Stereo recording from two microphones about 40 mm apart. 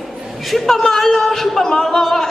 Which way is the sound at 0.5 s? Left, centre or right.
Centre.